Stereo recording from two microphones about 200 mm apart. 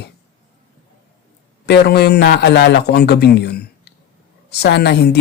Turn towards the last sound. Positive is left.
turn(degrees=55)  # may be behind; listen again after turning